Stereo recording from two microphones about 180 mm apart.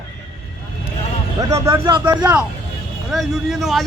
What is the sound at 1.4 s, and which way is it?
Speech, 15° right (ahead or behind).